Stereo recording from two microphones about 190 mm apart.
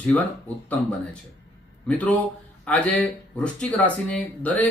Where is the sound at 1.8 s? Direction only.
10° left (ahead or behind).